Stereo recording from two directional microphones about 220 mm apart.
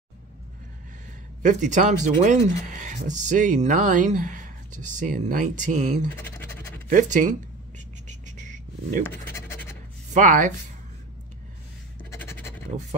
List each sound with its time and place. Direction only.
1.4 s speech: 35° right (ahead or behind)
6.1 s scratch: 10° left (ahead or behind)
6.9 s speech: 35° right (ahead or behind)
8.1 s a sound: 35° right (ahead or behind)
9.0 s scratch: 10° left (ahead or behind)
10.1 s speech: 35° right (ahead or behind)
12.0 s scratch: 10° left (ahead or behind)